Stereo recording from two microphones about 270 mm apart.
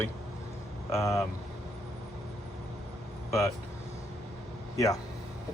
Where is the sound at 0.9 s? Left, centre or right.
Centre.